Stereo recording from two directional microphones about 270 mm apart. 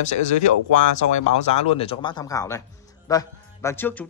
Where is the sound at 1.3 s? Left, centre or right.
Left.